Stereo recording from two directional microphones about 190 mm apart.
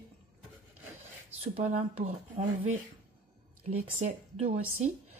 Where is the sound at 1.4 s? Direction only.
35° right (ahead or behind).